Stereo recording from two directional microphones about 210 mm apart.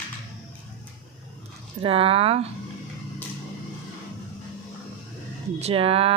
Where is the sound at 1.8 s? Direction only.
25° right (ahead or behind).